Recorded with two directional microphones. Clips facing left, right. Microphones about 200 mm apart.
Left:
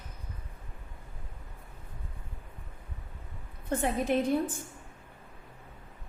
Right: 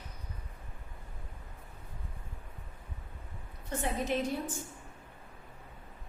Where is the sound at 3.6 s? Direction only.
55° left (ahead or behind).